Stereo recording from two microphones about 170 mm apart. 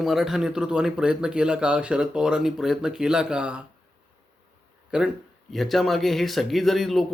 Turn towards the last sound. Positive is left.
turn(degrees=0)  # may be behind; listen again after turning